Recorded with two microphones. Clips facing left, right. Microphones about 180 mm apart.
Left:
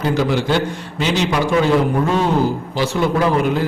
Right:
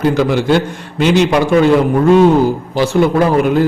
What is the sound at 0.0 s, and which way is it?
A man's voice, 55° right (ahead or behind).